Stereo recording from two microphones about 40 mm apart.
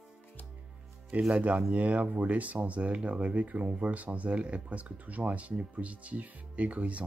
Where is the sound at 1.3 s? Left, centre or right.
Right.